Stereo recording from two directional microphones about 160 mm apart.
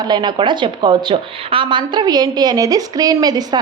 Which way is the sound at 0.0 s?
25° right (ahead or behind).